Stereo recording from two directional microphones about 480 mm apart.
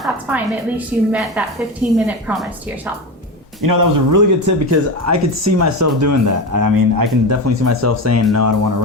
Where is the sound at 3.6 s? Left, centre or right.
Right.